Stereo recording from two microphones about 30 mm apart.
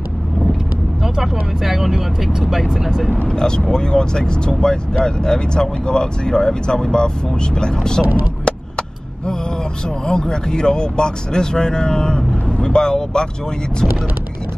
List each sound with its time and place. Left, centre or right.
1.0 s speech: centre
3.3 s speech: left
8.5 s vehicle: left
10.0 s speech: left